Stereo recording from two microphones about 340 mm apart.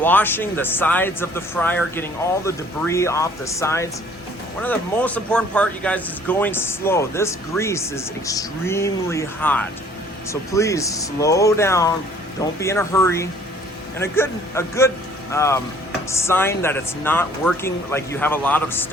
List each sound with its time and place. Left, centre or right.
0.0 s speech: centre